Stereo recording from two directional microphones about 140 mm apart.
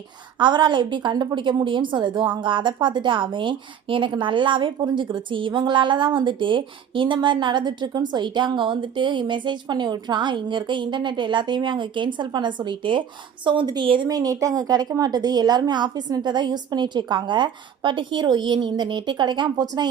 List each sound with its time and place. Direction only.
0.3 s a woman's voice: 35° right (ahead or behind)